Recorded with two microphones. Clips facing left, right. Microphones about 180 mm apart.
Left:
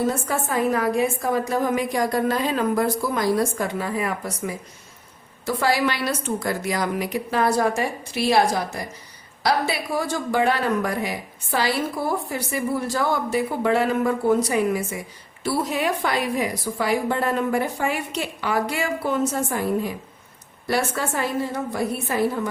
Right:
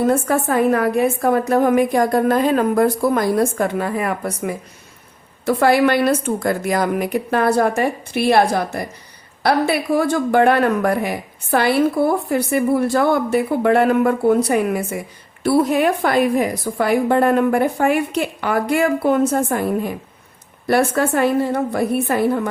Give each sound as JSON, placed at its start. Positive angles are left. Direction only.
{"t": 0.1, "sound": "a woman's voice", "side_deg": -55}